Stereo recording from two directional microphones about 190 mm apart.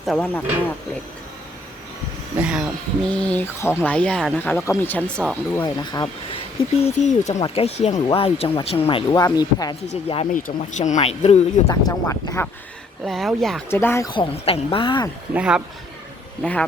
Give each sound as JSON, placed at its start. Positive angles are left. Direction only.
{"t": 0.0, "sound": "speech", "side_deg": 5}
{"t": 2.4, "sound": "speech", "side_deg": -5}
{"t": 5.6, "sound": "speech", "side_deg": 20}
{"t": 10.3, "sound": "speech", "side_deg": 40}
{"t": 11.7, "sound": "speech", "side_deg": 20}
{"t": 13.1, "sound": "speech", "side_deg": 0}
{"t": 13.7, "sound": "speech", "side_deg": 15}
{"t": 15.3, "sound": "speech", "side_deg": -5}
{"t": 16.4, "sound": "speech", "side_deg": 5}